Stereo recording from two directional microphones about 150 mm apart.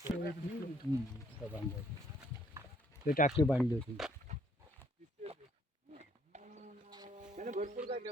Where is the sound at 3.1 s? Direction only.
65° left (ahead or behind).